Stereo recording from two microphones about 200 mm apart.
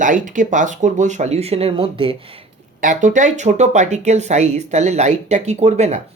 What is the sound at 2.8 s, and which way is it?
Speech, 40° right (ahead or behind).